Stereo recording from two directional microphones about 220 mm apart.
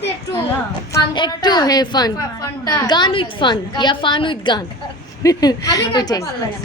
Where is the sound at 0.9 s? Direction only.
20° left (ahead or behind).